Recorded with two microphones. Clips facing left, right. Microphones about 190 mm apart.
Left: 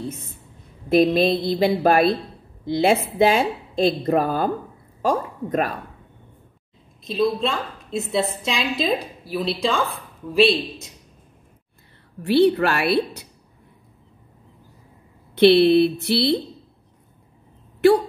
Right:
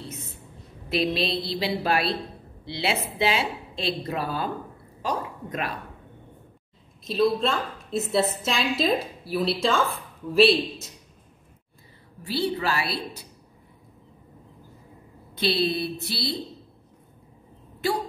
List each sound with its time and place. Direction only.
0.8 s a woman's voice: 50° left (ahead or behind)
7.1 s a woman's voice: centre (ahead or behind)
12.2 s speech: 60° left (ahead or behind)
15.3 s speech: 65° left (ahead or behind)